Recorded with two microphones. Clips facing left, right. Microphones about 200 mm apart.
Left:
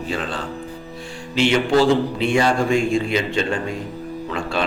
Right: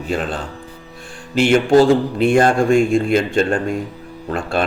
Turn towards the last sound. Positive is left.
turn(degrees=-50)  # may be behind; listen again after turning